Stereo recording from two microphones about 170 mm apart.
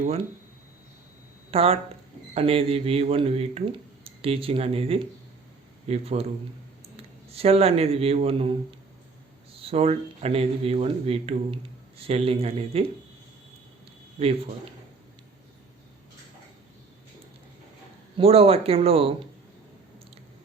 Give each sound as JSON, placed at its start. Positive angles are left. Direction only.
{"t": 1.5, "sound": "speech", "side_deg": -35}
{"t": 7.3, "sound": "speech", "side_deg": -35}
{"t": 9.6, "sound": "speech", "side_deg": -35}
{"t": 18.2, "sound": "speech", "side_deg": -35}